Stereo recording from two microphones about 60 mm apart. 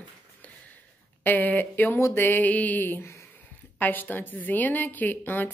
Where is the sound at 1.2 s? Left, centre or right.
Left.